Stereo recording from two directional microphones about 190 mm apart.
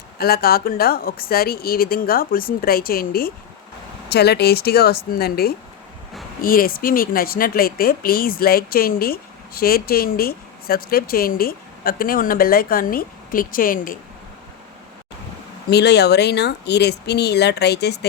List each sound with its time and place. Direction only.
0.2 s speech: 55° left (ahead or behind)
15.7 s speech: 60° left (ahead or behind)